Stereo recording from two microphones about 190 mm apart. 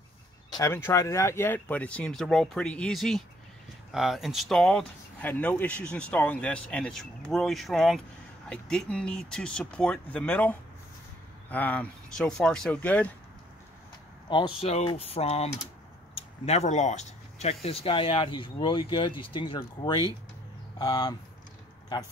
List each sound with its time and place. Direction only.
0.5 s speech: 15° left (ahead or behind)
14.3 s speech: 30° left (ahead or behind)